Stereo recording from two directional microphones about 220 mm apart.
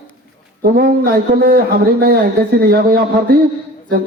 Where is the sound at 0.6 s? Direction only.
45° right (ahead or behind).